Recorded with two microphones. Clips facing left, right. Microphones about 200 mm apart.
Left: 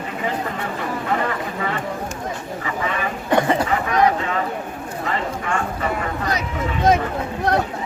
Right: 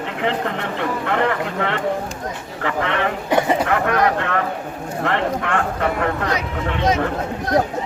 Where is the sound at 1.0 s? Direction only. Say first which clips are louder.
Right 3 dB; 70° right (ahead or behind).